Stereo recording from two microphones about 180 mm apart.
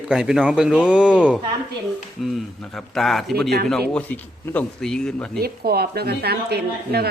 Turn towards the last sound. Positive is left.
turn(degrees=-60)  # may be behind; listen again after turning